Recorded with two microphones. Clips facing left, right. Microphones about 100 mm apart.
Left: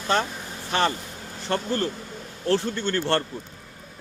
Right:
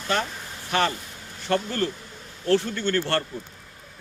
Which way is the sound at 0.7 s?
30° left (ahead or behind).